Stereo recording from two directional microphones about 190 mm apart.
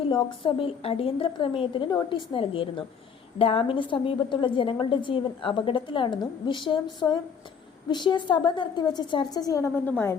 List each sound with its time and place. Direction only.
0.1 s a woman's voice: 25° left (ahead or behind)